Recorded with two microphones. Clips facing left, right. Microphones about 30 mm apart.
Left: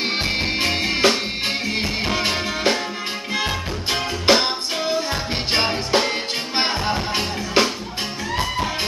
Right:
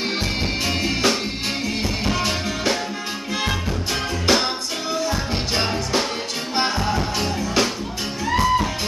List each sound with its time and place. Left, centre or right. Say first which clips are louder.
0.4 s music: left 2 dB; left
3.9 s music: left 3 dB; left